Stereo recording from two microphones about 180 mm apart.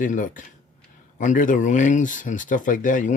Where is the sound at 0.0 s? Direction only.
45° left (ahead or behind).